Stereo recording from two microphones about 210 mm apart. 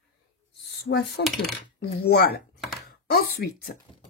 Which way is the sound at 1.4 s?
50° left (ahead or behind).